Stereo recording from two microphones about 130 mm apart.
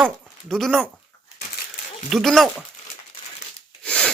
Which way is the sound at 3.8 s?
5° left (ahead or behind).